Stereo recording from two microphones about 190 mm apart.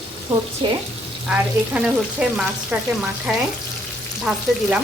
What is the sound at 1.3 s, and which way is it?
Frying, 5° right (ahead or behind).